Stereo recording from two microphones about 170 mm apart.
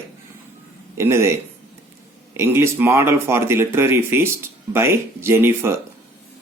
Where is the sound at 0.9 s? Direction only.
15° right (ahead or behind).